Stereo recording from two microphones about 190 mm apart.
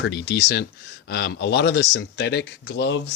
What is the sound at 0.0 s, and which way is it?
Speech, 65° left (ahead or behind).